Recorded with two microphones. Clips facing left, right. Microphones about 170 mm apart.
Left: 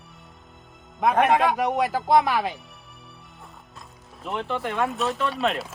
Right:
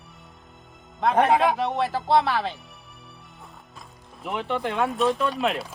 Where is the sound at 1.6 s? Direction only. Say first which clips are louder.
Left 2 dB; 15° left (ahead or behind).